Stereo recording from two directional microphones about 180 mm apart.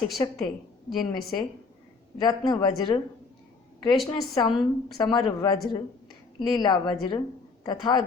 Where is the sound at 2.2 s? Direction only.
25° left (ahead or behind).